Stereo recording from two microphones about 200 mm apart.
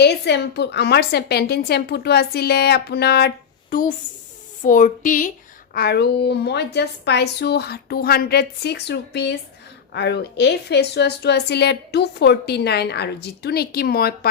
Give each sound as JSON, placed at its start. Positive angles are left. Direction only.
{"t": 0.0, "sound": "a woman's voice", "side_deg": 55}
{"t": 5.7, "sound": "a woman's voice", "side_deg": 50}